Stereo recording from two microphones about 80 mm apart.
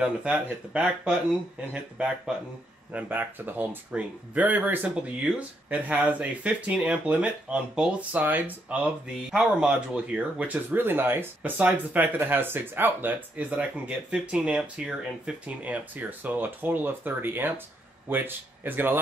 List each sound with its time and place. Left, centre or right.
0.0 s speech: centre
8.2 s speech: right
9.3 s speech: centre; by 18.9 s right